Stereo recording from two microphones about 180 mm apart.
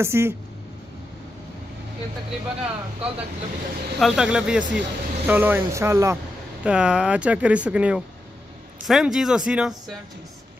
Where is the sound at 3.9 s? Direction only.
Centre (ahead or behind).